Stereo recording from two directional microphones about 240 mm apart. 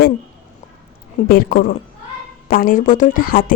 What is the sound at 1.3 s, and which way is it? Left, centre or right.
A woman's voice, left.